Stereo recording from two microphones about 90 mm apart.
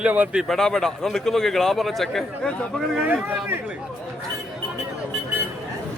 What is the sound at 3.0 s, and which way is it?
Speech, 20° right (ahead or behind).